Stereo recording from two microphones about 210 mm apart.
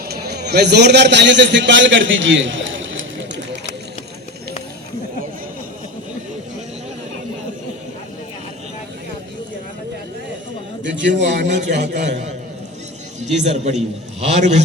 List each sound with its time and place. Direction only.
0.0 s a man's voice: 50° right (ahead or behind); by 3.1 s 65° right (ahead or behind)
10.9 s a man's voice: 60° right (ahead or behind)
11.7 s a man's voice: 35° right (ahead or behind)
13.2 s a man's voice: 30° right (ahead or behind)